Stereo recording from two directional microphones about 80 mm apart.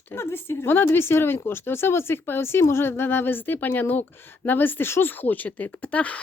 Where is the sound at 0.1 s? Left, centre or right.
Left.